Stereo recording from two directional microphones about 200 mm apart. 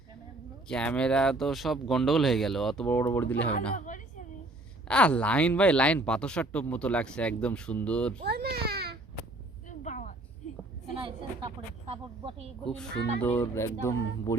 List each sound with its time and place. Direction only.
0.7 s speech: 5° left (ahead or behind)
3.8 s a woman's voice: 40° left (ahead or behind)
4.9 s speech: 5° left (ahead or behind)
8.2 s a child's voice: 50° right (ahead or behind)
9.6 s a sound: 40° left (ahead or behind)
11.9 s speech: 30° right (ahead or behind)
12.6 s speech: 5° left (ahead or behind)